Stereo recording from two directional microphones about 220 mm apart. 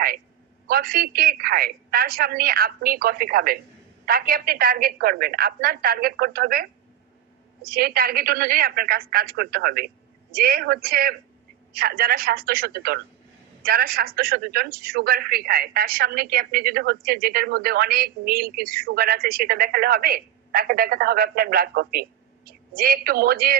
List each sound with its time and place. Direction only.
0.7 s a woman's voice: 45° right (ahead or behind)